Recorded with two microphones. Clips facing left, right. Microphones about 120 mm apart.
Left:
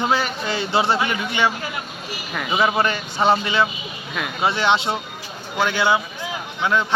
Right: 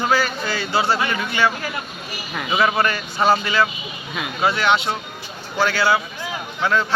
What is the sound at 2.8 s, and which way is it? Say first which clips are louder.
A man's voice: even; 25° left (ahead or behind).